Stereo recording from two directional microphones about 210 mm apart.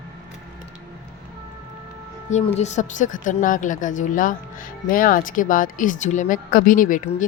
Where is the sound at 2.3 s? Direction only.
35° left (ahead or behind).